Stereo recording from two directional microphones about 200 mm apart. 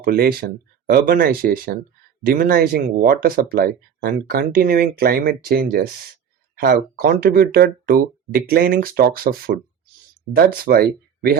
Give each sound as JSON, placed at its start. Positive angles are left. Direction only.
{"t": 0.0, "sound": "speech", "side_deg": -50}